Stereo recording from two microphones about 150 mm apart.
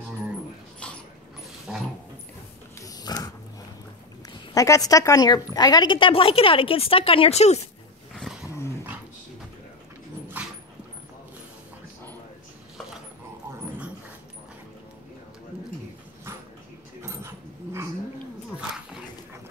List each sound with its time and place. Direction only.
1.7 s dog: centre (ahead or behind)
2.8 s snort: 25° left (ahead or behind)
4.3 s a woman's voice: 20° left (ahead or behind); by 7.6 s 45° left (ahead or behind)
10.4 s dog: 10° right (ahead or behind)
17.0 s keys jangling: 20° right (ahead or behind)